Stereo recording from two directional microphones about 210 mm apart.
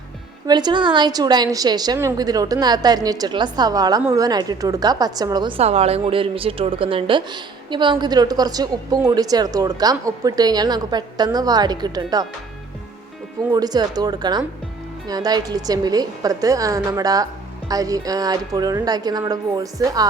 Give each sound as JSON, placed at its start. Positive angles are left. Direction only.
{"t": 0.4, "sound": "a woman's voice", "side_deg": -20}
{"t": 13.5, "sound": "a woman's voice", "side_deg": -20}